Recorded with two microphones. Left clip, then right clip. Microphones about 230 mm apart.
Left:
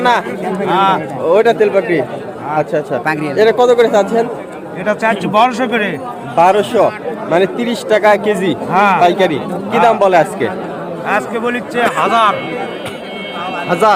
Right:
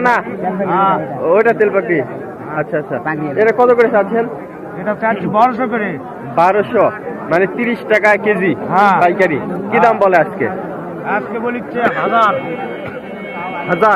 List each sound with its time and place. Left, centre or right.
0.0 s a man's voice: left
11.1 s speech: left
11.9 s a man's voice: centre